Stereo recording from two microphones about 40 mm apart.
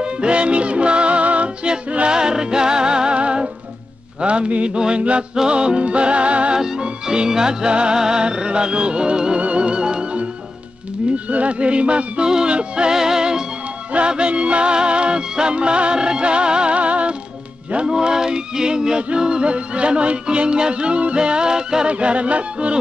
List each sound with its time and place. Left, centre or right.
0.0 s music: right
6.5 s music: centre
11.2 s music: right
12.9 s music: centre
13.9 s music: right
17.8 s music: centre
21.8 s music: right